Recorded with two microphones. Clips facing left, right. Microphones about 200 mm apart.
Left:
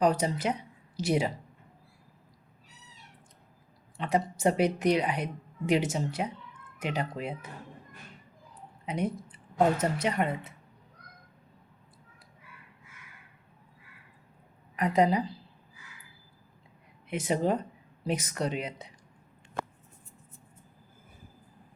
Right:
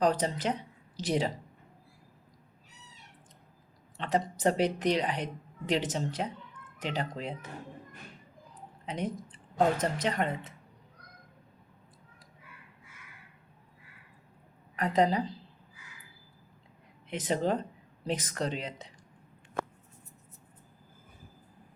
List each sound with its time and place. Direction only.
0.0 s speech: 10° left (ahead or behind)
3.9 s speech: 10° left (ahead or behind)
8.9 s speech: 10° left (ahead or behind)
14.8 s speech: 10° left (ahead or behind)
17.1 s speech: 10° left (ahead or behind)